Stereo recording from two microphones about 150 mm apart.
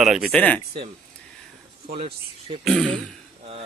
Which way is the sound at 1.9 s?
40° right (ahead or behind).